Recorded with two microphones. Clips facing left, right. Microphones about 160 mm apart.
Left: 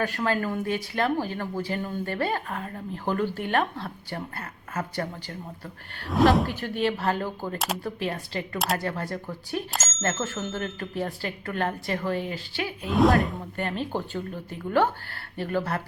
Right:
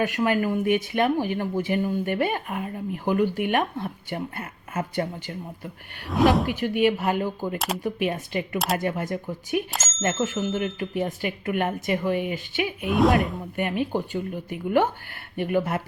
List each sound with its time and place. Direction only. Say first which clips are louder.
0.0 s speech: right 3 dB; 15° right (ahead or behind)
6.1 s speech: even; centre (ahead or behind)
6.5 s speech: right 5 dB; 15° right (ahead or behind)
8.5 s speech: right 1 dB; centre (ahead or behind)
8.8 s speech: right 4 dB; 20° right (ahead or behind)
12.9 s speech: even; centre (ahead or behind)
13.6 s speech: right 4 dB; 15° right (ahead or behind)